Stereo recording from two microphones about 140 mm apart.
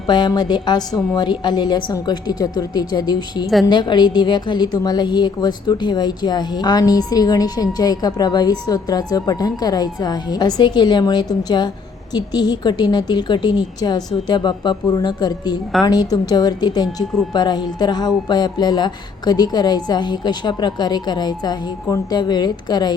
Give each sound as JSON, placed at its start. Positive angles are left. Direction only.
{"t": 0.1, "sound": "a woman's voice", "side_deg": 30}